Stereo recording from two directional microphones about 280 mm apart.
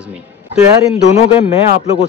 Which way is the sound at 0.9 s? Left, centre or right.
Left.